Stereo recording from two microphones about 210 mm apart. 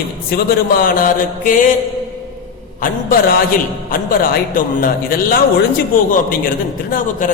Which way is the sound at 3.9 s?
45° left (ahead or behind).